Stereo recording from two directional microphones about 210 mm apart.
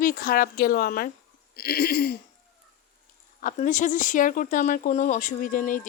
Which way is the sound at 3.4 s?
40° left (ahead or behind).